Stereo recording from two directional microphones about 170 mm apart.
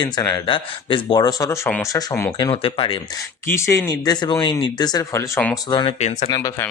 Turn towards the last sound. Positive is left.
turn(degrees=20)  # may be behind; listen again after turning